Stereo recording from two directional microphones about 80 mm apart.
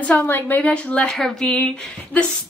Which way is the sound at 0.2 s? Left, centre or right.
Left.